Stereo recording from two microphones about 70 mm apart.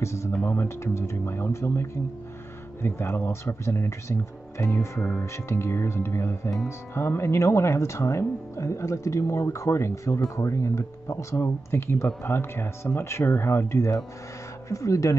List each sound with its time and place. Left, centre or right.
0.0 s speech: left
0.3 s speech: left